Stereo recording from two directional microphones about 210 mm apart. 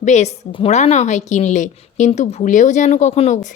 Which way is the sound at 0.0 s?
35° left (ahead or behind).